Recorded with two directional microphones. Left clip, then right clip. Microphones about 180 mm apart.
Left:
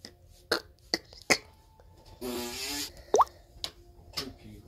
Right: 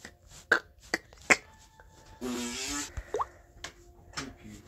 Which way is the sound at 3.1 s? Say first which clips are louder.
Left 10 dB; 60° left (ahead or behind).